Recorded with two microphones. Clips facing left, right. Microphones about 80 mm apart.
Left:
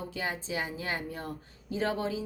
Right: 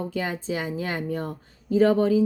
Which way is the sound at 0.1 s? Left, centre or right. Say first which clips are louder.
Right 6 dB; right.